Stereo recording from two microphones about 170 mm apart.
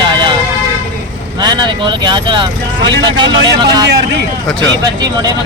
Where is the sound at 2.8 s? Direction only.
90° right.